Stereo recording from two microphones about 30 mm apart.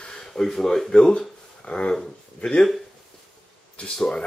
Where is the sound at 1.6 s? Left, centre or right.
Left.